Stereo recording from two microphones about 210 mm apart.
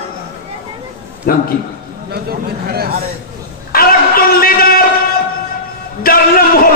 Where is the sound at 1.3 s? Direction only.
45° left (ahead or behind).